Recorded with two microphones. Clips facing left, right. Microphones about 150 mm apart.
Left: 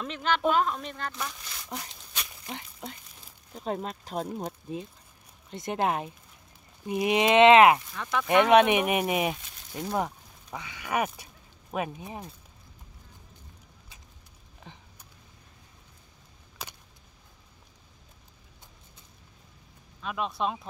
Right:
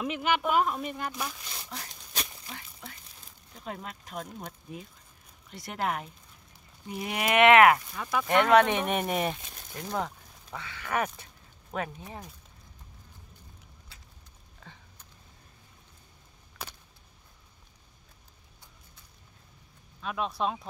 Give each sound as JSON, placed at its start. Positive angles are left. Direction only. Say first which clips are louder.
{"t": 0.0, "sound": "speech", "louder": "left 1 dB", "side_deg": -10}
{"t": 1.7, "sound": "speech", "louder": "left 2 dB", "side_deg": 15}
{"t": 7.9, "sound": "speech", "louder": "even", "side_deg": -5}
{"t": 8.3, "sound": "speech", "louder": "left 2 dB", "side_deg": 15}
{"t": 9.8, "sound": "speech", "louder": "left 3 dB", "side_deg": 15}
{"t": 14.6, "sound": "a sound", "louder": "left 3 dB", "side_deg": 20}
{"t": 20.0, "sound": "speech", "louder": "even", "side_deg": 0}